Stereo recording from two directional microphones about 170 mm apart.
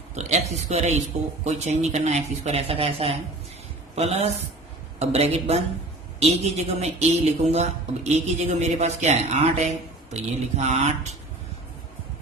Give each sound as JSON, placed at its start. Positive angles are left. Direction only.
{"t": 0.1, "sound": "a woman's voice", "side_deg": -40}